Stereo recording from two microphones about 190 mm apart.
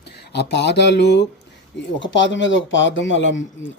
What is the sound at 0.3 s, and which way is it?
Speech, 65° left (ahead or behind).